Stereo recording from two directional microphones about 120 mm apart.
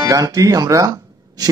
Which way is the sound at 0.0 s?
30° right (ahead or behind).